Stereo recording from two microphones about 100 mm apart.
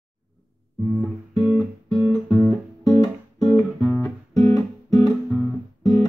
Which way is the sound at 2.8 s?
40° left (ahead or behind).